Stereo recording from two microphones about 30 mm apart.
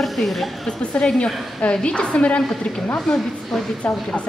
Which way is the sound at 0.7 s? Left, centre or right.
Left.